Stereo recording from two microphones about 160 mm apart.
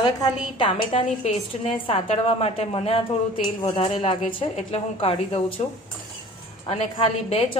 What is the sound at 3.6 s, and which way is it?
Speech, 25° left (ahead or behind).